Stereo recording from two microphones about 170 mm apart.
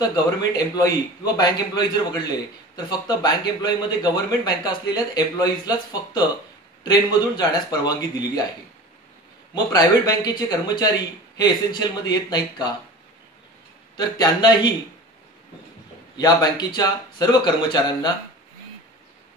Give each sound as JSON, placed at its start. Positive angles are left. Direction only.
{"t": 0.6, "sound": "a man's voice", "side_deg": 20}
{"t": 9.7, "sound": "a man's voice", "side_deg": 20}
{"t": 13.9, "sound": "a man's voice", "side_deg": 25}
{"t": 16.2, "sound": "a man's voice", "side_deg": 25}